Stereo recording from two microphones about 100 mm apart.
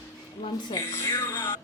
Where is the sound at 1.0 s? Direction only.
25° left (ahead or behind).